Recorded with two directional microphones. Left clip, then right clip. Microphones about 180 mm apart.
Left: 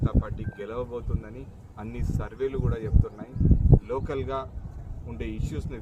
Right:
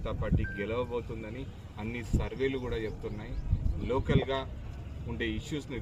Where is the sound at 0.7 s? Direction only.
10° left (ahead or behind).